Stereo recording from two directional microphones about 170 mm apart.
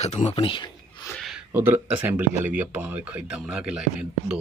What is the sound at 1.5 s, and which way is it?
Speech, 10° right (ahead or behind).